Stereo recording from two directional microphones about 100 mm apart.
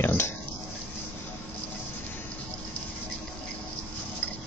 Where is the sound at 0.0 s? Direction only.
20° left (ahead or behind).